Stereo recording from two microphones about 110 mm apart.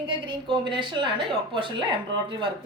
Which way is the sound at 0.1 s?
45° right (ahead or behind).